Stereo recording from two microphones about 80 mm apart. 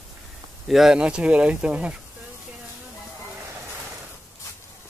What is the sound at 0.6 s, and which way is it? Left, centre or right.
Speech, centre.